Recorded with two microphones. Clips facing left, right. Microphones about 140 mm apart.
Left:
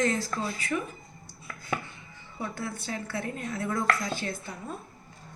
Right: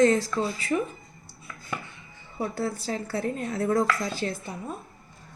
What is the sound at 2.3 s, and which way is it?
Speech, 35° right (ahead or behind).